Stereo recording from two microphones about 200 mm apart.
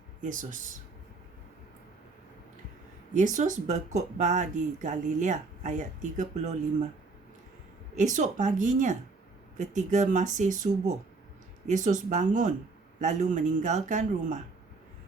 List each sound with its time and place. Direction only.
0.2 s speech: 40° right (ahead or behind)
3.2 s speech: 40° right (ahead or behind)
7.9 s speech: 35° right (ahead or behind)